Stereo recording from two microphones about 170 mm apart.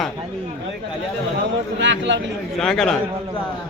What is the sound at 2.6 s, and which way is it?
Speech, 5° left (ahead or behind).